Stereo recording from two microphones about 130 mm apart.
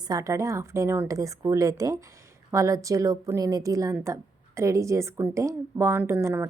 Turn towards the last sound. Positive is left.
turn(degrees=-15)  # may be behind; listen again after turning